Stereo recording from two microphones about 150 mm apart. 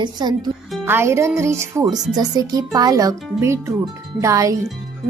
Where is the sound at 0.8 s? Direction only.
15° right (ahead or behind).